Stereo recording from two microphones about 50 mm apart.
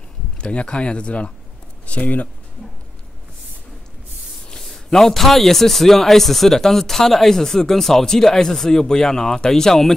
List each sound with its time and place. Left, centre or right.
0.4 s speech: left
4.5 s a man's voice: centre